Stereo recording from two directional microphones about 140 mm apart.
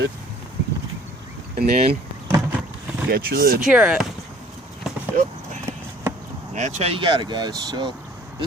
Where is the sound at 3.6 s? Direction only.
5° right (ahead or behind).